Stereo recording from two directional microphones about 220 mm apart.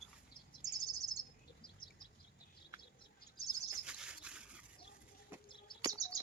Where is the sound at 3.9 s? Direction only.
5° right (ahead or behind).